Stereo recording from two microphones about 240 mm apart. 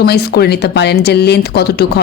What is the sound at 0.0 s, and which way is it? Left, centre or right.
A man's voice, left.